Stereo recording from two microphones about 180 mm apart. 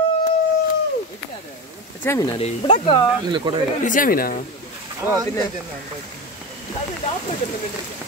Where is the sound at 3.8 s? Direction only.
50° left (ahead or behind).